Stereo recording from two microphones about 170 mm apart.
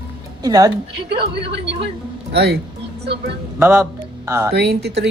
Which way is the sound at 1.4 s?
90° right.